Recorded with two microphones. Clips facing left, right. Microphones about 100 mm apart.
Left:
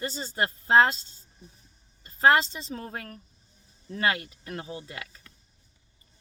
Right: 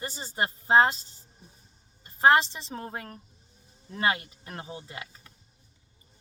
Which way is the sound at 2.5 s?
30° right (ahead or behind).